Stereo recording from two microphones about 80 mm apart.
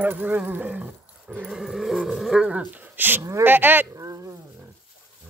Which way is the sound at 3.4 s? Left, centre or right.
Right.